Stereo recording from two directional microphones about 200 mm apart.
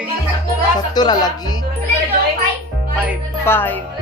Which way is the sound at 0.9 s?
20° left (ahead or behind).